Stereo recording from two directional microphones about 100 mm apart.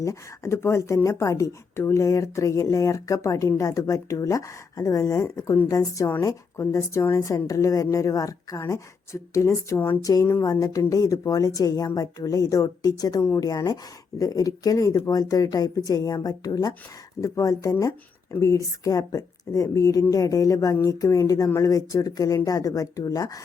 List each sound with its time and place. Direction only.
0.0 s speech: 30° left (ahead or behind)
10.0 s speech: 35° left (ahead or behind)